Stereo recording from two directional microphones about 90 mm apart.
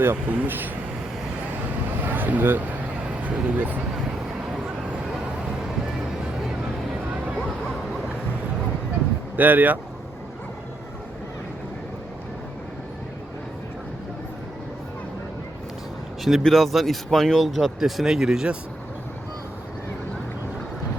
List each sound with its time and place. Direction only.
0.0 s speech: 20° right (ahead or behind)
2.0 s vehicle: 20° right (ahead or behind)
3.2 s speech: 20° right (ahead or behind)
9.3 s speech: 20° right (ahead or behind)
16.2 s speech: centre (ahead or behind)